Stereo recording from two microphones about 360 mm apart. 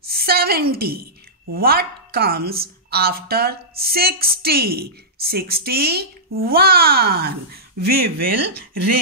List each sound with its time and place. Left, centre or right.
0.1 s a woman's voice: right
8.7 s speech: right